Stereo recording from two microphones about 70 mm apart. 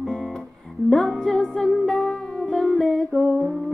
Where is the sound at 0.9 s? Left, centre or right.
Centre.